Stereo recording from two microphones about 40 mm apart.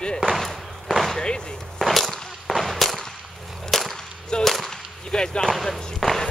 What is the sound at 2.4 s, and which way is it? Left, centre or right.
Firecracker, centre.